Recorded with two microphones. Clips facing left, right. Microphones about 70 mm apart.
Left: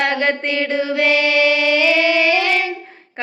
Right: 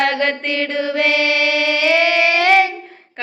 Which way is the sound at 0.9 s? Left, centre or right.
Right.